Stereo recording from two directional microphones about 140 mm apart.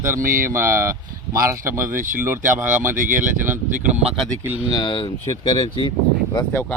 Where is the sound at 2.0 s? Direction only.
70° right (ahead or behind).